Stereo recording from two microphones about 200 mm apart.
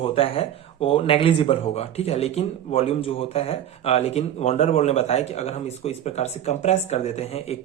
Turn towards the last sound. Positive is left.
turn(degrees=30)  # may be behind; listen again after turning